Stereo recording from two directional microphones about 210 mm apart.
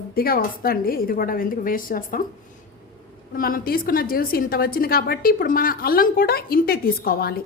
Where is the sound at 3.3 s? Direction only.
45° left (ahead or behind).